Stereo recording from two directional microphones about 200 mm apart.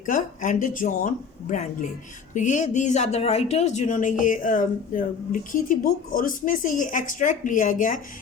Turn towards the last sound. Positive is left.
turn(degrees=40)  # may be behind; listen again after turning